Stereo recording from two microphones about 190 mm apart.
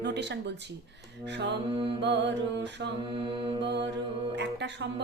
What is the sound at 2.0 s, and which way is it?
Mantra, 65° right (ahead or behind).